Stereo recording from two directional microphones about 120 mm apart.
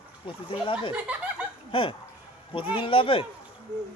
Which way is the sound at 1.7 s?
45° left (ahead or behind).